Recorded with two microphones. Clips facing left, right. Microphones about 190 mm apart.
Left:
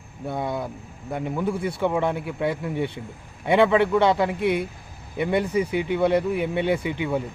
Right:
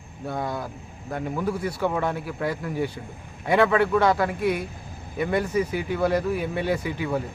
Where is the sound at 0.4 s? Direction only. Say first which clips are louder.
Left 2 dB; 20° left (ahead or behind).